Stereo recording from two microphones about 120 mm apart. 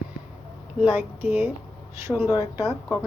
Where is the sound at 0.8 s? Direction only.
10° right (ahead or behind).